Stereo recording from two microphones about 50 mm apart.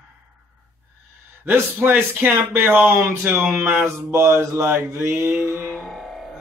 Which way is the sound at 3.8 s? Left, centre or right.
Right.